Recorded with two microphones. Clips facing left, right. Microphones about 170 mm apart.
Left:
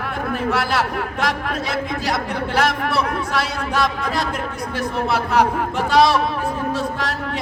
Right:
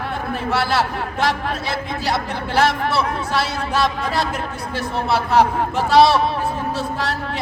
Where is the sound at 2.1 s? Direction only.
30° right (ahead or behind).